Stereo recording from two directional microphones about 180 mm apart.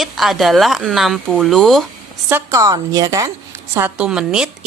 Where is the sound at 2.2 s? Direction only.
15° right (ahead or behind).